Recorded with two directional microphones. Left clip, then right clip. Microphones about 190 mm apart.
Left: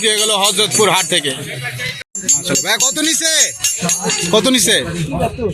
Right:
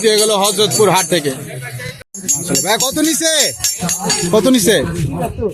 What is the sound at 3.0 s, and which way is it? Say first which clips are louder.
Speech: right 1 dB; 10° right (ahead or behind).